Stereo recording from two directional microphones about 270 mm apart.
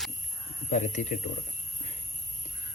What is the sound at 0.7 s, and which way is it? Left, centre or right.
Speech, left.